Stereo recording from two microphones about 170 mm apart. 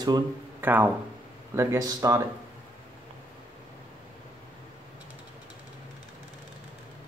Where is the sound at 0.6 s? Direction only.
10° right (ahead or behind).